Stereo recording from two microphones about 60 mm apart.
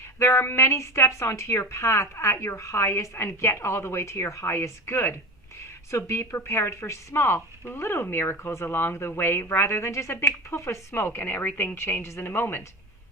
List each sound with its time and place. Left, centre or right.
0.2 s a woman's voice: left
10.9 s a woman's voice: left